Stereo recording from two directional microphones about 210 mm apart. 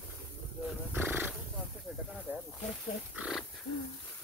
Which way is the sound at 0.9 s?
10° right (ahead or behind).